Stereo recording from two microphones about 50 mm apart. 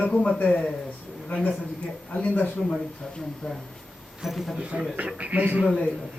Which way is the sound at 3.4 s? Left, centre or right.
Centre.